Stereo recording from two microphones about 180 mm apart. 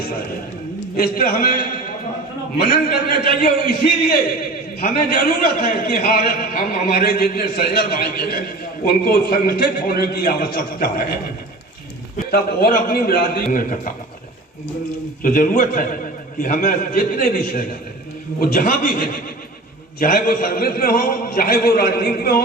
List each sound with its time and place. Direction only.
0.9 s a man's voice: 55° left (ahead or behind)
12.3 s a man's voice: 60° left (ahead or behind)
15.2 s a man's voice: 50° left (ahead or behind)